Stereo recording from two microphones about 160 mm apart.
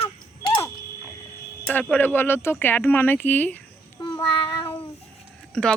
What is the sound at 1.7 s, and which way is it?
Speech, 10° left (ahead or behind).